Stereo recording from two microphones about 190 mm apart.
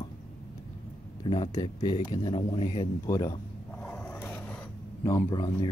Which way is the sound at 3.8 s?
10° left (ahead or behind).